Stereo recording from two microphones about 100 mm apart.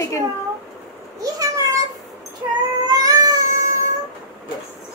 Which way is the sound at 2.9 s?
35° right (ahead or behind).